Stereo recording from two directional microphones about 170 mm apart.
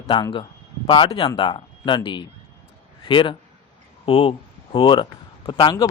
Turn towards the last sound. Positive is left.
turn(degrees=25)  # may be behind; listen again after turning